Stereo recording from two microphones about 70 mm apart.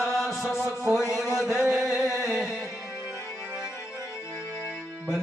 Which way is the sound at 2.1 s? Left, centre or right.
Right.